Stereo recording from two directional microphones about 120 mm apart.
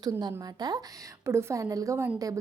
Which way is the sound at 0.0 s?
35° right (ahead or behind).